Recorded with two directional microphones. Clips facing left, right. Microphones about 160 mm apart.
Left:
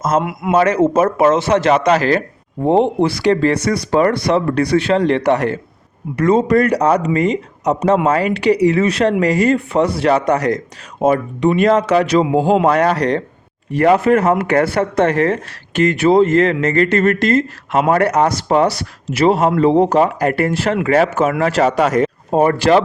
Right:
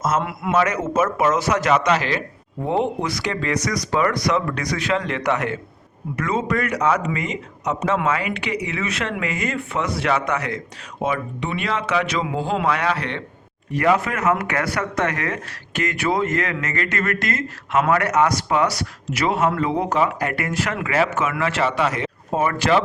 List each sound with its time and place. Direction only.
0.2 s a man's voice: 15° left (ahead or behind)
0.5 s speech: 30° left (ahead or behind)